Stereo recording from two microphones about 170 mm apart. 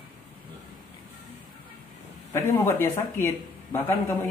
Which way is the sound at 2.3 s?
15° left (ahead or behind).